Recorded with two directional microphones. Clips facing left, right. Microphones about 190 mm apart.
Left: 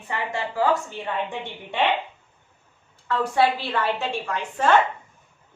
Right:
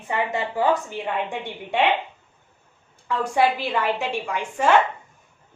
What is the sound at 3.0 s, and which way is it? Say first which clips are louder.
A woman's voice: even; 15° right (ahead or behind).